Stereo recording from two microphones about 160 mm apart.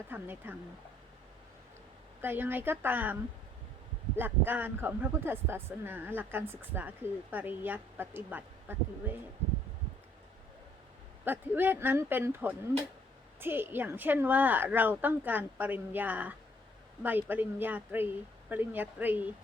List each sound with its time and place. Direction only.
0.1 s speech: 10° right (ahead or behind)
2.2 s speech: 10° right (ahead or behind)
4.2 s speech: 10° right (ahead or behind)
9.4 s a sound: 45° right (ahead or behind)
11.3 s speech: 10° right (ahead or behind)